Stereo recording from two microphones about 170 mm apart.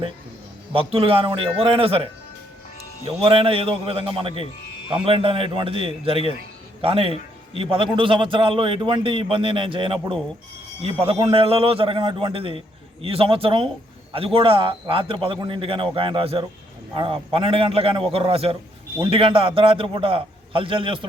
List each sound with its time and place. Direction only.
0.7 s a man's voice: 35° right (ahead or behind)
3.1 s a man's voice: 30° right (ahead or behind)